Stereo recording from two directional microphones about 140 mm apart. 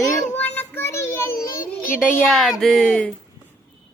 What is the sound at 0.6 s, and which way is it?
Child singing, 15° left (ahead or behind).